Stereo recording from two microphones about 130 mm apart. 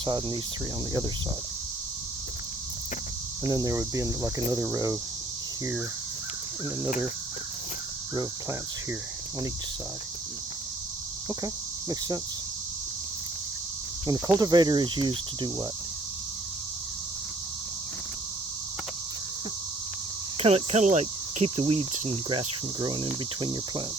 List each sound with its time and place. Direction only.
0.0 s cricket: 35° right (ahead or behind)
3.4 s cricket: 25° right (ahead or behind)
11.3 s cricket: 30° right (ahead or behind)
14.1 s cricket: 30° right (ahead or behind)
20.4 s cricket: 55° right (ahead or behind); by 23.8 s 40° right (ahead or behind)